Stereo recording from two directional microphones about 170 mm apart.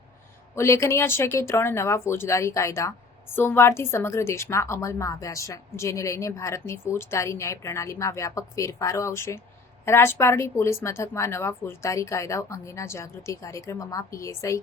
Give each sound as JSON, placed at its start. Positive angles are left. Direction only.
{"t": 0.5, "sound": "speech", "side_deg": 15}